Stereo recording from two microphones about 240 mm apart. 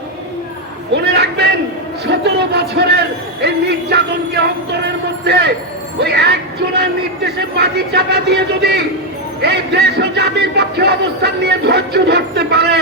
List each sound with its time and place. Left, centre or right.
1.0 s a sound: right
2.0 s music: right
4.7 s a sound: right
6.0 s music: right
6.7 s speech: right
9.4 s music: right